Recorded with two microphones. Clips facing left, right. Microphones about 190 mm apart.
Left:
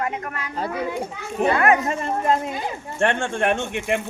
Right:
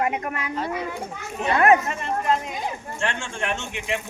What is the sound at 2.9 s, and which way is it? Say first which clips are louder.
Speech: left 10 dB; 55° left (ahead or behind).